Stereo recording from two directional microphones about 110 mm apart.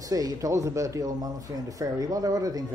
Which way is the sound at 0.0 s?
35° right (ahead or behind).